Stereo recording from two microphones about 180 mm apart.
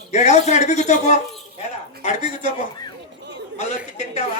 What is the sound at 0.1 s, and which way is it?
A woman's voice, 40° left (ahead or behind).